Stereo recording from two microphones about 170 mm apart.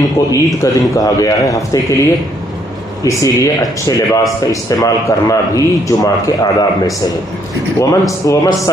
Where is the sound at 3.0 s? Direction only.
20° left (ahead or behind).